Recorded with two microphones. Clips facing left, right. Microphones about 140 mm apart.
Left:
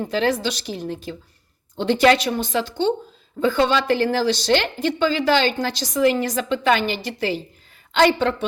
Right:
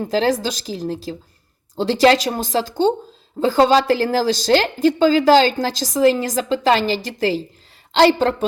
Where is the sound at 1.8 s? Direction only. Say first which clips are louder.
Right 2 dB; 35° right (ahead or behind).